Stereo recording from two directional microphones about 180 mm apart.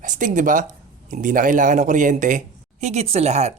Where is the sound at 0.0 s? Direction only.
45° right (ahead or behind).